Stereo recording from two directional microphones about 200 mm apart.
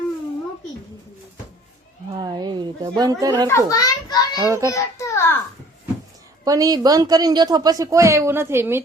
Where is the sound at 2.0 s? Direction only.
20° right (ahead or behind).